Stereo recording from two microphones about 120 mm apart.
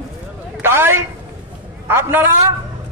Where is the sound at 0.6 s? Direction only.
20° right (ahead or behind).